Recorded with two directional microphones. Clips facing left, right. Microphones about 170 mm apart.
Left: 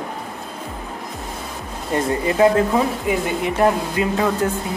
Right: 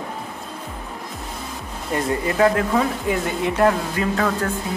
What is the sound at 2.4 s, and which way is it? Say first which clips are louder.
Speech: left 3 dB; 20° left (ahead or behind).